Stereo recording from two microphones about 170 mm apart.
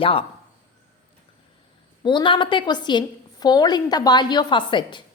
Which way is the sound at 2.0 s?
30° left (ahead or behind).